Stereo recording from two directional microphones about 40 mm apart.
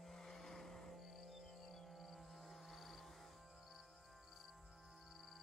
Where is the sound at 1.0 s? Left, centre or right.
Centre.